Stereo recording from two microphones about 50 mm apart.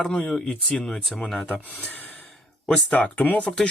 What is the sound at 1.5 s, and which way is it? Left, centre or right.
Speech, left.